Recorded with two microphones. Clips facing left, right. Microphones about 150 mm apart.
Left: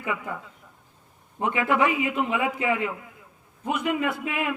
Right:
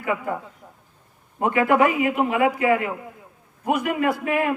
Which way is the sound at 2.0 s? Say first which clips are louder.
Right 5 dB; 50° right (ahead or behind).